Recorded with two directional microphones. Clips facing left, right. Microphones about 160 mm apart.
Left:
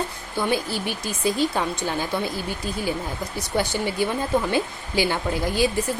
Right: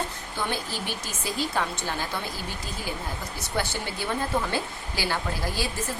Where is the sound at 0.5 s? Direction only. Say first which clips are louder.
Left 7 dB; 10° left (ahead or behind).